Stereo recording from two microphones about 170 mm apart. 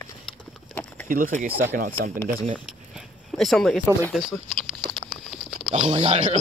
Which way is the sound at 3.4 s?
Centre (ahead or behind).